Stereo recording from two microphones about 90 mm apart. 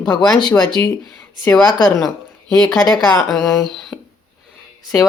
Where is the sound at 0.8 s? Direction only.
25° left (ahead or behind).